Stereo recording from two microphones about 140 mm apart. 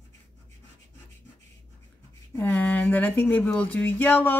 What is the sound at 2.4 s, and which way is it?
Speech, 10° left (ahead or behind).